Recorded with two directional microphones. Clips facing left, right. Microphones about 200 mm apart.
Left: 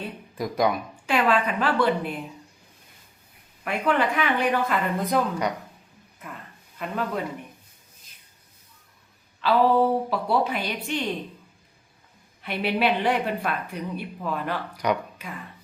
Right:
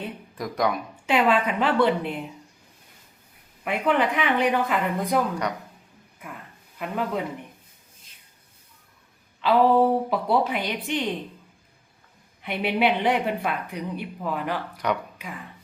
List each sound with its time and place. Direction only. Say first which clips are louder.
0.3 s speech: left 2 dB; centre (ahead or behind)
1.0 s a woman's voice: right 1 dB; 20° right (ahead or behind)
3.6 s a woman's voice: right 1 dB; 15° right (ahead or behind)
5.3 s speech: left 1 dB; 5° left (ahead or behind)
6.1 s a sound: even; 10° right (ahead or behind)
9.4 s a woman's voice: right 1 dB; 15° right (ahead or behind)
12.4 s a woman's voice: right 1 dB; 20° right (ahead or behind)
14.8 s speech: left 2 dB; centre (ahead or behind)